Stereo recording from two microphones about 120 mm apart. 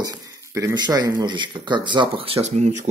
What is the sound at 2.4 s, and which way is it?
Speech, 70° right (ahead or behind).